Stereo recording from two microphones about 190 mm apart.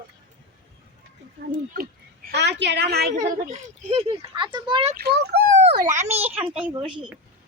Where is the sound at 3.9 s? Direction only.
30° right (ahead or behind).